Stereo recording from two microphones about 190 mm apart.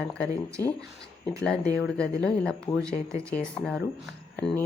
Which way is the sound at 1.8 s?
5° left (ahead or behind).